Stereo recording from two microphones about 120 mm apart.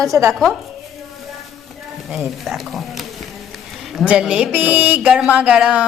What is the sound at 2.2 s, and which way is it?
A woman's voice, centre (ahead or behind).